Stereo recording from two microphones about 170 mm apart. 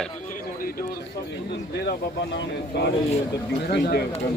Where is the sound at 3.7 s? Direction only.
65° left (ahead or behind).